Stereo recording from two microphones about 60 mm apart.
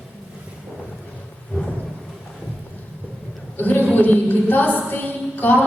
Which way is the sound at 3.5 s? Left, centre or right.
Left.